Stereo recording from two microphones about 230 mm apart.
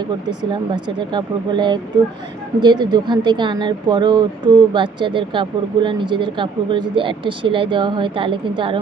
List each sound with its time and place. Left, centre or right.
0.7 s speech: centre
2.8 s speech: centre